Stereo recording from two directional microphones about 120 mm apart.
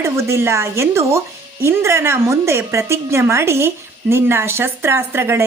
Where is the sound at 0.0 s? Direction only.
20° right (ahead or behind).